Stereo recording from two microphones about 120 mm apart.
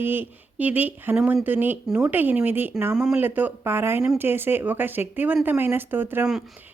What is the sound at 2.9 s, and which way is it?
A woman's voice, 5° right (ahead or behind).